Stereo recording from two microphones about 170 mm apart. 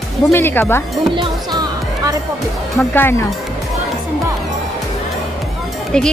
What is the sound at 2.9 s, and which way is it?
Speech, 10° left (ahead or behind).